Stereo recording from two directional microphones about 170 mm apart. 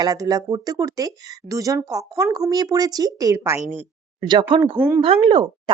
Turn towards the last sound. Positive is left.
turn(degrees=-30)  # may be behind; listen again after turning